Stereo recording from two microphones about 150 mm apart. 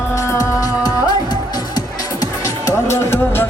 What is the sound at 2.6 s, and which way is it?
Music, 15° left (ahead or behind).